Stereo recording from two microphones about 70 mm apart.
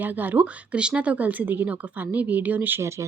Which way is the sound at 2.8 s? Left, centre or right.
Right.